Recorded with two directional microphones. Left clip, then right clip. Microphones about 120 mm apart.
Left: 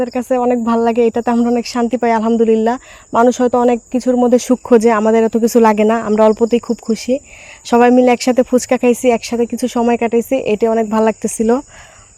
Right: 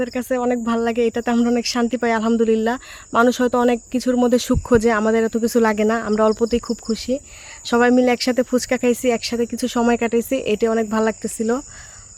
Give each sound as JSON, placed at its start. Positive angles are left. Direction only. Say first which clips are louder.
{"t": 0.0, "sound": "speech", "louder": "left 6 dB", "side_deg": 25}
{"t": 11.0, "sound": "speech", "louder": "left 7 dB", "side_deg": 40}